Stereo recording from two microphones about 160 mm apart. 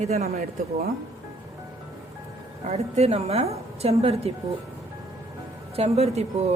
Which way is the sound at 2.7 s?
40° right (ahead or behind).